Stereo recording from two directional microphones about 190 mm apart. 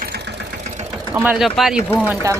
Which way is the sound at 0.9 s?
10° right (ahead or behind).